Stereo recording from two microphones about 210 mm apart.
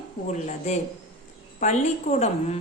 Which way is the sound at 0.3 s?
35° left (ahead or behind).